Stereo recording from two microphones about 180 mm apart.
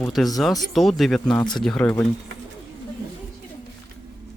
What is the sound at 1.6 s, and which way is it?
Speech, 5° left (ahead or behind).